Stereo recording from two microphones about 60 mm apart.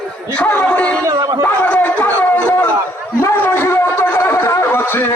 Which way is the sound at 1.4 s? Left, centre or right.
Left.